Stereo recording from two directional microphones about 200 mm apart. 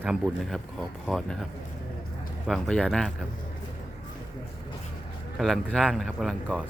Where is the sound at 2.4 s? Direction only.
Centre (ahead or behind).